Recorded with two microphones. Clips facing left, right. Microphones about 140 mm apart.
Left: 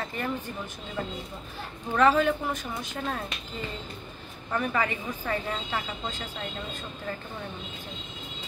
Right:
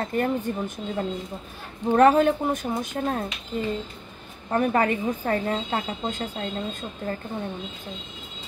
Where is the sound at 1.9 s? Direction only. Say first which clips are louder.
Right 5 dB; 45° right (ahead or behind).